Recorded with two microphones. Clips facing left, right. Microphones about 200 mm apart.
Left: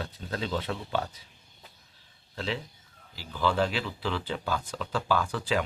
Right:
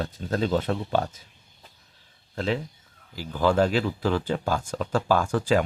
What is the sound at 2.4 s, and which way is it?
Speech, 50° right (ahead or behind).